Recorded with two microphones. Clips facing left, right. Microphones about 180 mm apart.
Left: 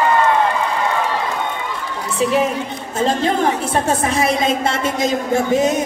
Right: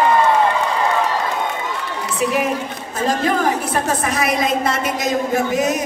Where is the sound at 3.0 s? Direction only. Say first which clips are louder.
Left 1 dB; 25° left (ahead or behind).